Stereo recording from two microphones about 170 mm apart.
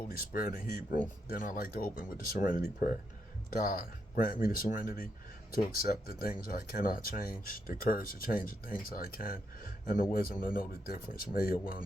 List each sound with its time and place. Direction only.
0.3 s speech: 55° left (ahead or behind)